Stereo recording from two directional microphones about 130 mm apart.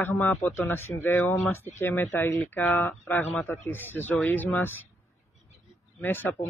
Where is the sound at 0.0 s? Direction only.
15° left (ahead or behind).